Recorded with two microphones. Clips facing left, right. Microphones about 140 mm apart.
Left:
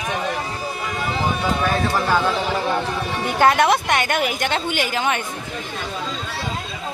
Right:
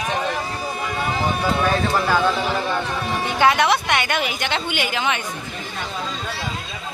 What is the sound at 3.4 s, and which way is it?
A woman's voice, 50° left (ahead or behind).